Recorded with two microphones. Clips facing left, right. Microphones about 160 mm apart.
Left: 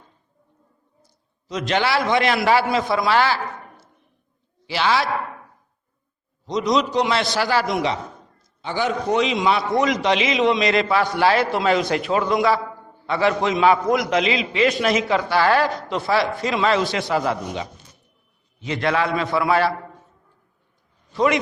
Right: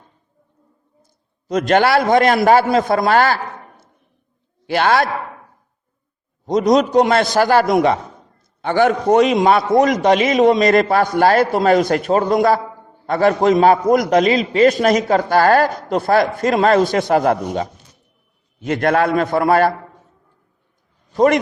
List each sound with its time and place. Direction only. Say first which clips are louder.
1.0 s a man's voice: right 9 dB; 50° right (ahead or behind)
4.6 s a man's voice: right 5 dB; 55° right (ahead or behind)
6.4 s a man's voice: right 6 dB; 50° right (ahead or behind)
21.1 s a man's voice: right 6 dB; 45° right (ahead or behind)